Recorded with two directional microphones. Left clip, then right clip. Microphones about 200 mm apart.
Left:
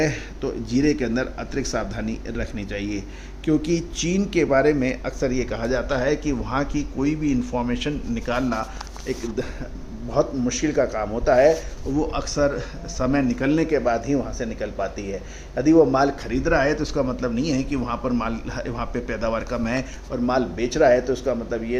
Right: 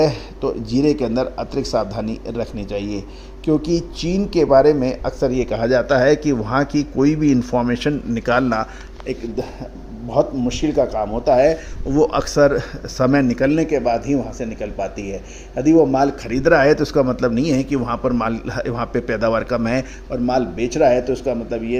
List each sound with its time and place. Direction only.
0.1 s speech: 10° right (ahead or behind)
1.0 s speech: 10° left (ahead or behind)
1.6 s a man's voice: 15° right (ahead or behind); by 8.6 s 30° right (ahead or behind)
9.0 s speech: 10° right (ahead or behind)
10.5 s a man's voice: 20° right (ahead or behind)
11.9 s a man's voice: 40° right (ahead or behind)